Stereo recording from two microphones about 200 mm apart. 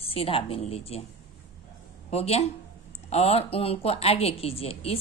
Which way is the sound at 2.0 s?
30° left (ahead or behind).